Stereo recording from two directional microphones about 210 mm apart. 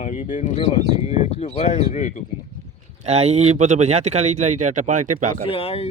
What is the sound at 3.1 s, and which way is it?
Speech, 30° right (ahead or behind).